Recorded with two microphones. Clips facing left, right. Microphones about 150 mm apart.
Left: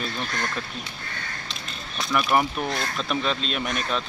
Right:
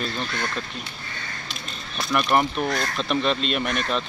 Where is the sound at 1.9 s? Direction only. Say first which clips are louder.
Right 1 dB; centre (ahead or behind).